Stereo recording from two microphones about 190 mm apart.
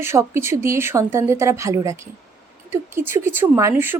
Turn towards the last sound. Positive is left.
turn(degrees=-15)  # may be behind; listen again after turning